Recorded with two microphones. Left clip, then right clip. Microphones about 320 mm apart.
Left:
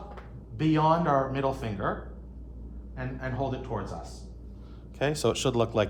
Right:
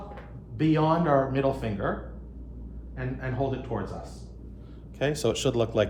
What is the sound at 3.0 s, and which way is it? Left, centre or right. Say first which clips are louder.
Speech: right 2 dB; centre.